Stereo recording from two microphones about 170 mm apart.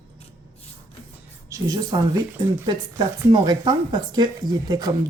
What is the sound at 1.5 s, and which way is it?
A woman's voice, 20° right (ahead or behind).